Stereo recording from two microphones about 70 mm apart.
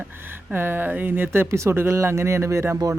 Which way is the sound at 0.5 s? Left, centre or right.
Right.